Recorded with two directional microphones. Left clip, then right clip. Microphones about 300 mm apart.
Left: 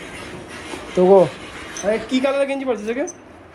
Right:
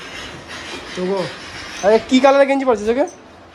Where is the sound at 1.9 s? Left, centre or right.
Right.